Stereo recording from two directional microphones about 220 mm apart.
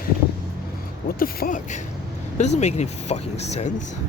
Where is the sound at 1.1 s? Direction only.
40° left (ahead or behind).